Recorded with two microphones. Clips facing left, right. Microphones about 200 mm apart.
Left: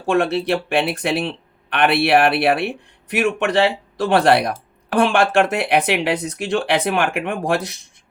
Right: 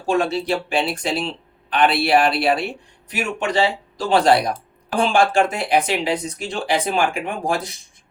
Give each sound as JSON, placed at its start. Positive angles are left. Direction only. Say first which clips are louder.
{"t": 0.1, "sound": "speech", "louder": "left 2 dB", "side_deg": 60}